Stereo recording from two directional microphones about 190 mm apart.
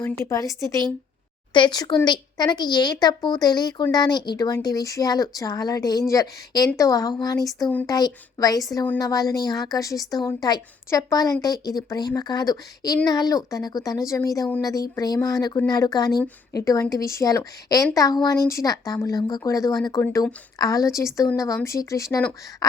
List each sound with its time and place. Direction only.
0.0 s a woman's voice: 15° left (ahead or behind)